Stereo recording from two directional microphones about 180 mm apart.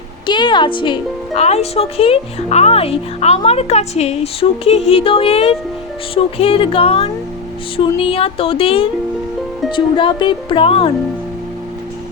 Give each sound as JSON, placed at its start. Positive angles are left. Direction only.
{"t": 0.3, "sound": "speech", "side_deg": 25}